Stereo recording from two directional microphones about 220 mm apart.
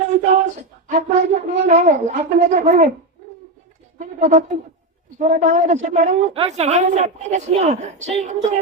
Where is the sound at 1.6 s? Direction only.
30° right (ahead or behind).